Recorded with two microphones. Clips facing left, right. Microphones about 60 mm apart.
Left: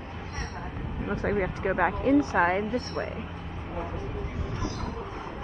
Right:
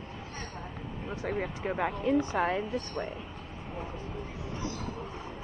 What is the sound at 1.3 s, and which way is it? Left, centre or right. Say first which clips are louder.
Speech: left 5 dB; left.